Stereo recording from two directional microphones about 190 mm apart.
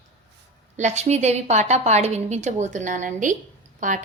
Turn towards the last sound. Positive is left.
turn(degrees=-40)  # may be behind; listen again after turning